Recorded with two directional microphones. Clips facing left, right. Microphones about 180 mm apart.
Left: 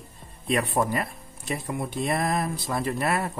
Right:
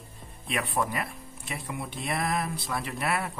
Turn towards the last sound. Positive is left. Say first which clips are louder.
# left 5 dB
turn(degrees=40)  # may be behind; listen again after turning